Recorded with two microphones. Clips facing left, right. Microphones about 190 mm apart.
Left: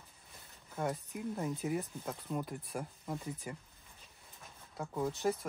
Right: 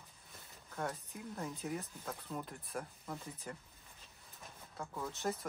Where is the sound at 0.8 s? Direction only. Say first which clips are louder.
Left 5 dB; 15° left (ahead or behind).